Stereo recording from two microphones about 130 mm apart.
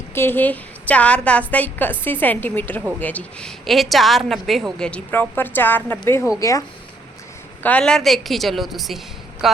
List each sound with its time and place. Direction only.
0.1 s a woman's voice: 15° left (ahead or behind)
7.6 s a woman's voice: 10° left (ahead or behind)